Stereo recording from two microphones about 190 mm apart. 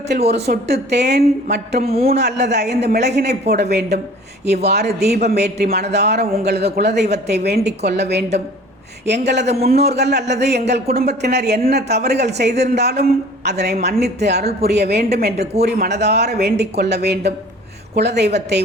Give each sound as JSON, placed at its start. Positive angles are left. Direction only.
{"t": 0.1, "sound": "speech", "side_deg": -60}